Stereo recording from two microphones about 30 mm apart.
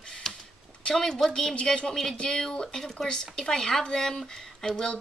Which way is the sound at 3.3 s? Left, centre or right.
Centre.